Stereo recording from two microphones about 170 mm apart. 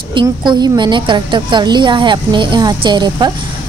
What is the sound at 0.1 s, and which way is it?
A woman's voice, 25° right (ahead or behind).